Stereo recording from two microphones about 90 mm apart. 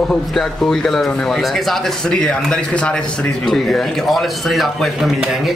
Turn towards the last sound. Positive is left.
turn(degrees=-5)  # may be behind; listen again after turning